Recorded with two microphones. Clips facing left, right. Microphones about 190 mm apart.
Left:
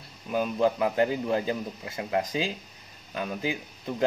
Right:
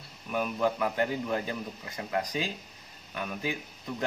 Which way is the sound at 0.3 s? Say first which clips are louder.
Left 4 dB; 30° left (ahead or behind).